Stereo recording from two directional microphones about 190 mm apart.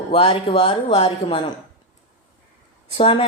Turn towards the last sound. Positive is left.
turn(degrees=30)  # may be behind; listen again after turning